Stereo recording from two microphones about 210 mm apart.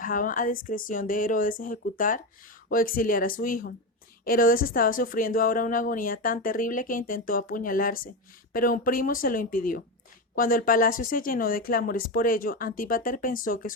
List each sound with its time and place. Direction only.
0.0 s speech: 40° left (ahead or behind)